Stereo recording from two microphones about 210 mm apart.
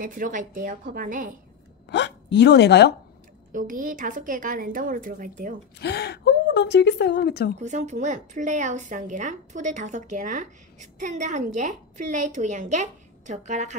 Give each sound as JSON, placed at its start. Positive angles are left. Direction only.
{"t": 0.0, "sound": "a woman's voice", "side_deg": -40}
{"t": 1.9, "sound": "speech", "side_deg": 55}
{"t": 3.5, "sound": "a woman's voice", "side_deg": -40}
{"t": 5.8, "sound": "a woman's voice", "side_deg": 50}
{"t": 7.6, "sound": "a woman's voice", "side_deg": -35}